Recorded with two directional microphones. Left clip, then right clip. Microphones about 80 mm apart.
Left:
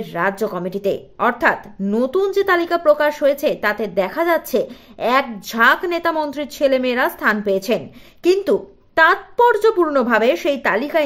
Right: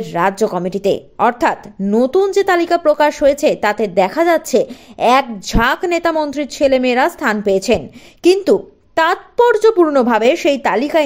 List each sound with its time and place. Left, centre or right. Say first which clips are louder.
0.0 s a woman's voice: right 5 dB; right
1.9 s a woman's voice: right 5 dB; right